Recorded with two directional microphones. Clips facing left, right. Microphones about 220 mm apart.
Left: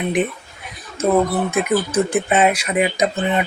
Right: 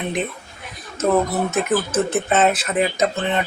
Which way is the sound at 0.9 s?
10° left (ahead or behind).